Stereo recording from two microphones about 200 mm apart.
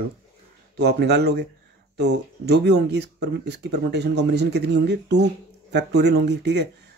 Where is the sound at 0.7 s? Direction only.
55° right (ahead or behind).